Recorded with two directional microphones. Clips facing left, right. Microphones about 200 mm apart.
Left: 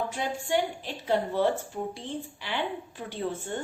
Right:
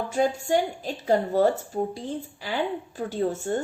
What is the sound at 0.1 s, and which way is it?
A woman's voice, 40° right (ahead or behind).